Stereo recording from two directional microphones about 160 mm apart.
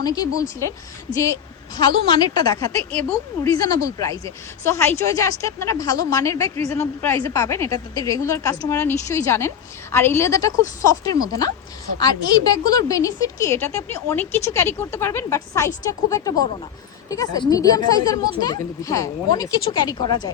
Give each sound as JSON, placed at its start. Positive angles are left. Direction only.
{"t": 0.0, "sound": "a woman's voice", "side_deg": 25}